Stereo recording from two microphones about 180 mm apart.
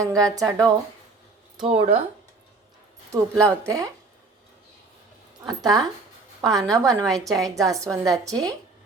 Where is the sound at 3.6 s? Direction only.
20° right (ahead or behind).